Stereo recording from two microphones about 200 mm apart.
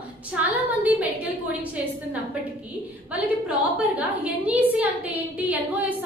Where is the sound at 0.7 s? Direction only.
10° right (ahead or behind).